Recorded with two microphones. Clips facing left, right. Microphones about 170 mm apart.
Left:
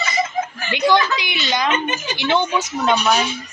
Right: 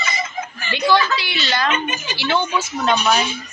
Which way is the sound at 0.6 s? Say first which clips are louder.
Even; 15° left (ahead or behind).